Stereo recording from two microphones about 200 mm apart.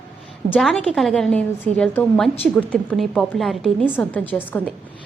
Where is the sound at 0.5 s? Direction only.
Centre (ahead or behind).